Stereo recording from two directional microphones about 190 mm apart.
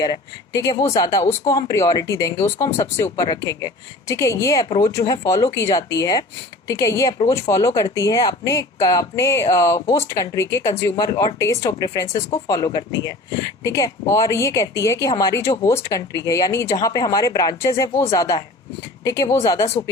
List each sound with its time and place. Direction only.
0.0 s a woman's voice: 20° left (ahead or behind)